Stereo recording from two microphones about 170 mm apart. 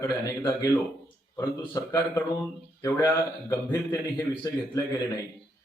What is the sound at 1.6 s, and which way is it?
Speech, 20° left (ahead or behind).